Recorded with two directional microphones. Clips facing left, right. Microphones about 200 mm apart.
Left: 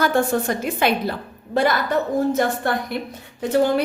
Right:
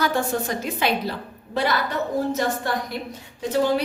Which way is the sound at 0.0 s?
55° left (ahead or behind).